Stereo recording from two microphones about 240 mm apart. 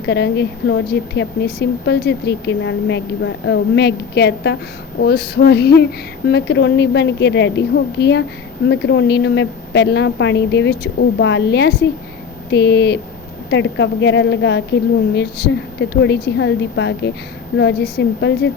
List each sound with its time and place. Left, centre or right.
0.0 s speech: left